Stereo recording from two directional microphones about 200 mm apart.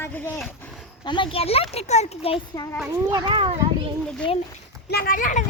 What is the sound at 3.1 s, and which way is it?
Speech, 25° right (ahead or behind).